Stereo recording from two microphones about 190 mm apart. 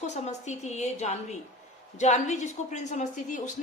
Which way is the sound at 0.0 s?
40° left (ahead or behind).